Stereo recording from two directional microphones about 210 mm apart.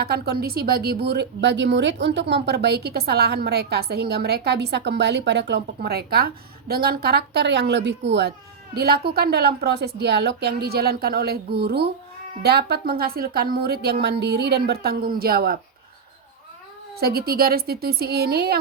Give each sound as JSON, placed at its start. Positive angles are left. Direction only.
{"t": 0.0, "sound": "a woman's voice", "side_deg": -50}
{"t": 17.0, "sound": "a woman's voice", "side_deg": -45}